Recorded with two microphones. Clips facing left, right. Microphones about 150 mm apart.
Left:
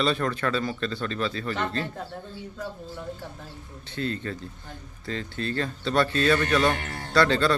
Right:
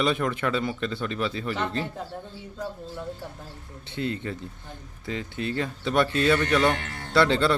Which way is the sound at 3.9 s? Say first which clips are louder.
Even; 20° right (ahead or behind).